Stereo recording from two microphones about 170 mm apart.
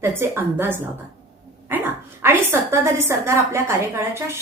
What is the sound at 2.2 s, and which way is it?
A woman's voice, 15° right (ahead or behind).